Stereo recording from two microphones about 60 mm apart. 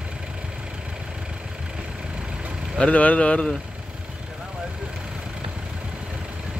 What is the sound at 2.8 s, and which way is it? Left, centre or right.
Speech, left.